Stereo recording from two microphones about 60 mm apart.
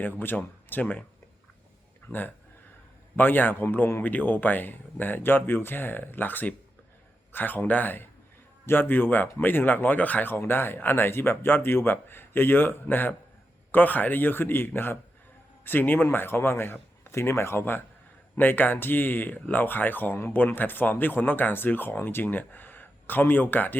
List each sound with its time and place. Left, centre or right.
0.0 s speech: left
3.2 s speech: left